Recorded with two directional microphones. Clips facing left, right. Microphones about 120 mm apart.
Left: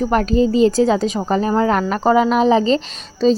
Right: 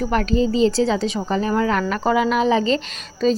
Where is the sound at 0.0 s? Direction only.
40° left (ahead or behind).